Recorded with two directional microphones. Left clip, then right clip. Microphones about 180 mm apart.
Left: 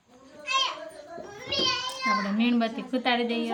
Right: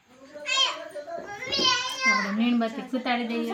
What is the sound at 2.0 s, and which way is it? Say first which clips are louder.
A child's voice: right 2 dB; 25° left (ahead or behind).